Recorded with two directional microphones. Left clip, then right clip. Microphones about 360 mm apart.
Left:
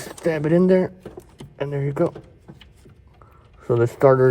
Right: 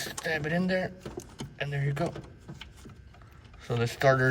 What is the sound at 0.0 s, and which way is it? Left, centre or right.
Speech, centre.